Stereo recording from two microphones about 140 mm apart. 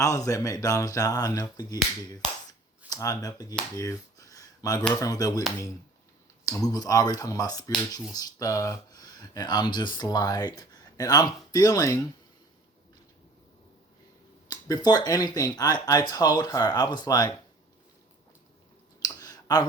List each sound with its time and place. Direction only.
0.0 s speech: 25° left (ahead or behind)
2.9 s speech: 25° left (ahead or behind)
3.8 s a sound: 25° left (ahead or behind)
4.9 s speech: 25° left (ahead or behind)
6.4 s speech: 25° left (ahead or behind)
14.5 s speech: 30° left (ahead or behind)
19.0 s clicking: 30° left (ahead or behind)